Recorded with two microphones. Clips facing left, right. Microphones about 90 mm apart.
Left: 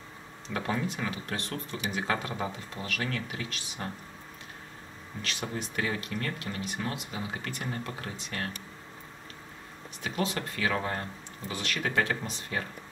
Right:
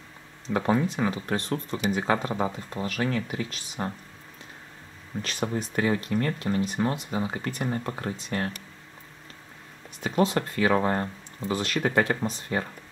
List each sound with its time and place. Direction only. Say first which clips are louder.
0.5 s speech: right 7 dB; 30° right (ahead or behind)
5.2 s speech: right 6 dB; 35° right (ahead or behind)
10.0 s speech: right 8 dB; 35° right (ahead or behind)